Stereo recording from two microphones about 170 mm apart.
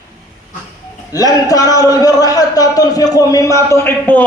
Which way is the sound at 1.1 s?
20° left (ahead or behind).